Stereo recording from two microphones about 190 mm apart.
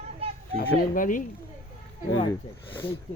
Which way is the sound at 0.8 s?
45° left (ahead or behind).